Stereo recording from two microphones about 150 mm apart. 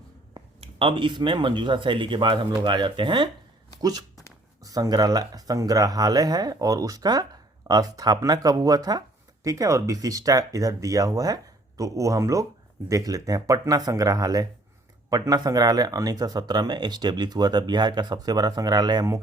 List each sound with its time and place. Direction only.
0.3 s speech: 35° right (ahead or behind)